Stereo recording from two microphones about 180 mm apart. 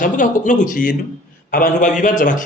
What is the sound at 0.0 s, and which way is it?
A man's voice, 45° left (ahead or behind).